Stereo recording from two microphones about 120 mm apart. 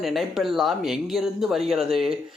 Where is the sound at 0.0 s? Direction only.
Centre (ahead or behind).